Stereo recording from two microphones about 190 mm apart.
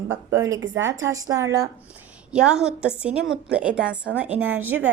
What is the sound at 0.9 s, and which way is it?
Speech, 15° right (ahead or behind).